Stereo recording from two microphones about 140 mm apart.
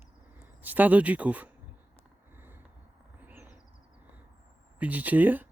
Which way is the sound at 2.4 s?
15° right (ahead or behind).